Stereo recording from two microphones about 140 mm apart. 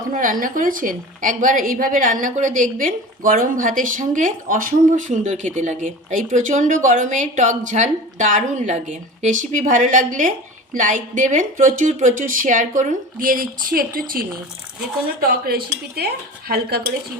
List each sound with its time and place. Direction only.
0.1 s speech: 70° right (ahead or behind)
2.2 s a woman's voice: 65° right (ahead or behind); by 15.6 s 90° right